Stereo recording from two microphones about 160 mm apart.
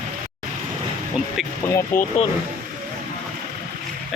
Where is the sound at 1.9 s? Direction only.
55° left (ahead or behind).